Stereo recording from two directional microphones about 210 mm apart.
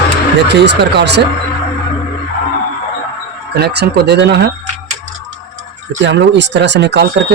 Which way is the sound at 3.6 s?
50° right (ahead or behind).